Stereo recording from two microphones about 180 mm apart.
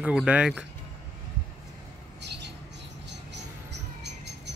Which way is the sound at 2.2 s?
70° right (ahead or behind).